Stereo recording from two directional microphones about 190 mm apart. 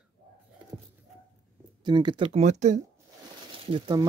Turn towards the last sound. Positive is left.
turn(degrees=-25)  # may be behind; listen again after turning